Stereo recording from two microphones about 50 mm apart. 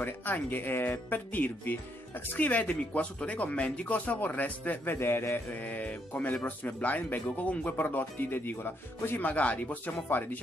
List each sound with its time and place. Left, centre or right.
0.0 s speech: left
4.9 s a man's voice: left
5.5 s speech: left
9.2 s speech: left
10.0 s speech: left